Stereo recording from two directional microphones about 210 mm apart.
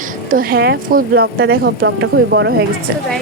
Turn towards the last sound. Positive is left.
turn(degrees=-55)  # may be behind; listen again after turning